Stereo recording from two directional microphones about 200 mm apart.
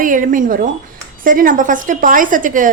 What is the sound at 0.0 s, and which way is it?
A woman's voice, 40° right (ahead or behind).